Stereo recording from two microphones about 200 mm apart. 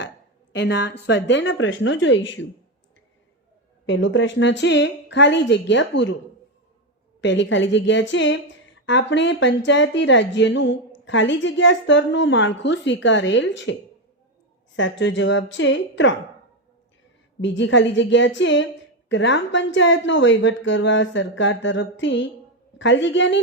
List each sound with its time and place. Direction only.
0.5 s a woman's voice: 60° left (ahead or behind)
3.8 s a woman's voice: 70° left (ahead or behind)
7.2 s a woman's voice: 65° left (ahead or behind)
14.8 s a woman's voice: 65° left (ahead or behind)
17.4 s a woman's voice: 65° left (ahead or behind)